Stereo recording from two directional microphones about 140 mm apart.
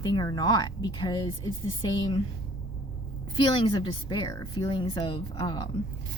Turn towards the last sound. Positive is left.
turn(degrees=30)  # may be behind; listen again after turning